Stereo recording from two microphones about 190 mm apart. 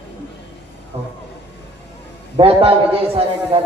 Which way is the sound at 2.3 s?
30° right (ahead or behind).